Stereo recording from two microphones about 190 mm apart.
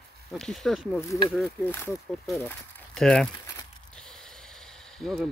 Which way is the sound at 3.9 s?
5° left (ahead or behind).